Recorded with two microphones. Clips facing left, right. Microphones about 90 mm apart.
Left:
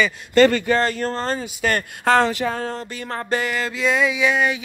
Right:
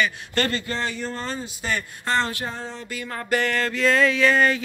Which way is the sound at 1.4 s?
65° left (ahead or behind).